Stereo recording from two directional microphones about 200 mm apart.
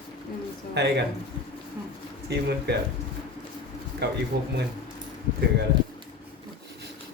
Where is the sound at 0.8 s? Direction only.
55° right (ahead or behind).